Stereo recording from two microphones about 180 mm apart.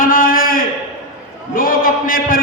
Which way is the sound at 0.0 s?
50° left (ahead or behind).